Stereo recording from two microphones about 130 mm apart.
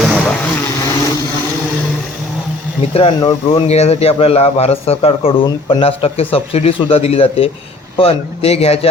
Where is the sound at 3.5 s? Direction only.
50° left (ahead or behind).